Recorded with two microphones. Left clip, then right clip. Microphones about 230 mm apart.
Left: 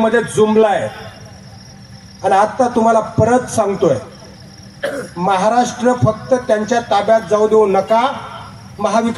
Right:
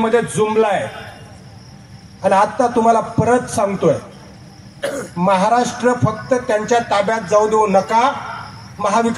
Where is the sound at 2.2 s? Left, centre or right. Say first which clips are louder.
Left 1 dB; left.